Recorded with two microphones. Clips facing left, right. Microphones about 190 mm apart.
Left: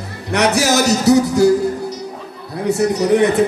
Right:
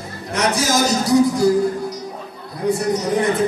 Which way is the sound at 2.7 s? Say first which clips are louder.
Left 5 dB; 70° left (ahead or behind).